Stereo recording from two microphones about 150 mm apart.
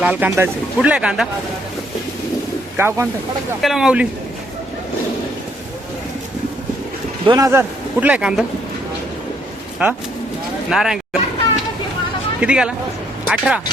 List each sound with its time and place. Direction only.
0.0 s speech: 10° right (ahead or behind)
2.7 s speech: 15° right (ahead or behind)
3.6 s speech: centre (ahead or behind)
7.3 s speech: 20° right (ahead or behind)
8.0 s speech: 5° right (ahead or behind)
9.8 s speech: 10° right (ahead or behind)
12.4 s speech: 5° right (ahead or behind)